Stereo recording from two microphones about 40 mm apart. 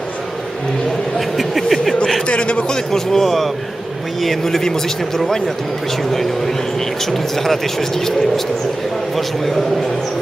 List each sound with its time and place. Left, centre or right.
1.6 s a sound: centre
2.2 s a man's voice: left; by 5.4 s centre
7.1 s a man's voice: centre